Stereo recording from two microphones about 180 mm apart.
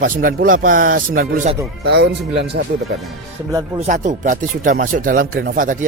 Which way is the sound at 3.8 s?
45° right (ahead or behind).